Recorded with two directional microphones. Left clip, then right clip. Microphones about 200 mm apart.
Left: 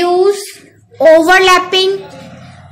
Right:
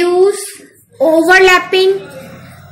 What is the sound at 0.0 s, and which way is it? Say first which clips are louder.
Child singing: even; 55° left (ahead or behind).